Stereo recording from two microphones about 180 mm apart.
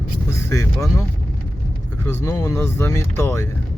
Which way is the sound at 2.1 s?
15° left (ahead or behind).